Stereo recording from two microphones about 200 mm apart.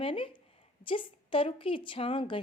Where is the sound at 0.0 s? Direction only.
25° left (ahead or behind).